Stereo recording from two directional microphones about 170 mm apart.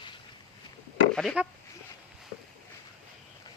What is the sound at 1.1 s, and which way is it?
Speech, 5° left (ahead or behind).